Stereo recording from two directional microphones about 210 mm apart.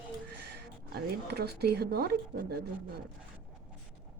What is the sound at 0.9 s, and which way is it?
Speech, 50° right (ahead or behind).